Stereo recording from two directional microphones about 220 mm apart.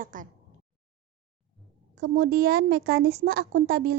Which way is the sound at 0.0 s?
40° right (ahead or behind).